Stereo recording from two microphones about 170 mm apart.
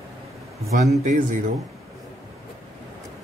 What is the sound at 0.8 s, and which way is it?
Speech, 45° right (ahead or behind).